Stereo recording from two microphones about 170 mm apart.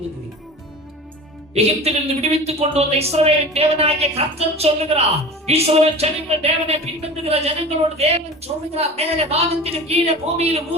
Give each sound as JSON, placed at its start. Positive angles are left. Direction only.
{"t": 1.5, "sound": "a woman's voice", "side_deg": -35}